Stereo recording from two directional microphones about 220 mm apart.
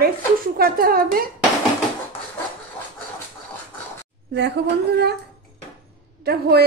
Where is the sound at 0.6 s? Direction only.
40° right (ahead or behind).